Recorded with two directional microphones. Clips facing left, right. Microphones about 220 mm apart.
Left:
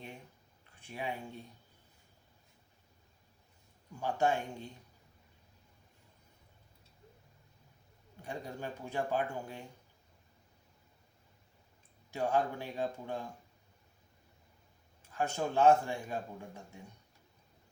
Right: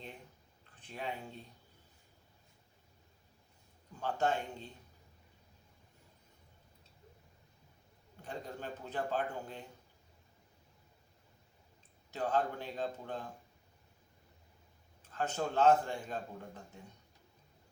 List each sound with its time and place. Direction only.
0.8 s a man's voice: 10° left (ahead or behind)
4.0 s a man's voice: 10° left (ahead or behind)
8.2 s a man's voice: 10° left (ahead or behind)
12.1 s a man's voice: 10° left (ahead or behind)
15.1 s a man's voice: 10° left (ahead or behind)